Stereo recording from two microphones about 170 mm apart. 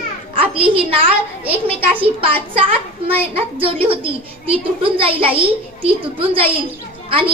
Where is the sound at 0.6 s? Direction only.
30° right (ahead or behind).